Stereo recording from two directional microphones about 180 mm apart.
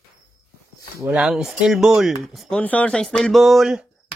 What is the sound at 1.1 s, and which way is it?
Speech, 5° right (ahead or behind).